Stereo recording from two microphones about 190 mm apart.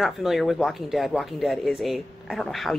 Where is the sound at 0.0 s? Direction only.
Centre (ahead or behind).